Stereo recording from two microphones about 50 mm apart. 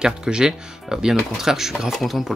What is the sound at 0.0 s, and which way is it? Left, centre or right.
Speech, centre.